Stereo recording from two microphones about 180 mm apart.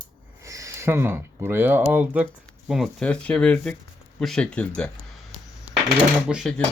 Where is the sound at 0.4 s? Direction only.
15° right (ahead or behind); by 4.9 s 5° left (ahead or behind).